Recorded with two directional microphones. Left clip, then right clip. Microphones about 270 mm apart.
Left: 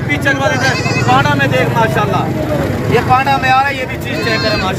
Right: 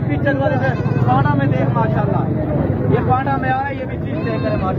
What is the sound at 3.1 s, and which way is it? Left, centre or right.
Speech, centre.